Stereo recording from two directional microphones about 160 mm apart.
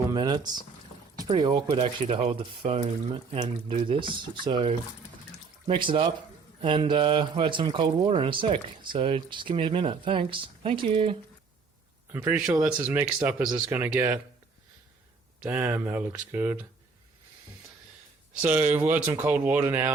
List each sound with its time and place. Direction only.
0.1 s speech: 25° right (ahead or behind)
1.8 s speech: 40° right (ahead or behind)
12.1 s speech: 10° right (ahead or behind)
15.4 s speech: 10° right (ahead or behind)
18.4 s speech: 10° right (ahead or behind)